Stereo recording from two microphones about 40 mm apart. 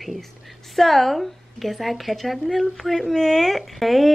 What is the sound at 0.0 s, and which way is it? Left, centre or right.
A woman's voice, centre.